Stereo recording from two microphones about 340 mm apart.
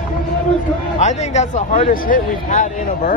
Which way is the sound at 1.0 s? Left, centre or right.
Centre.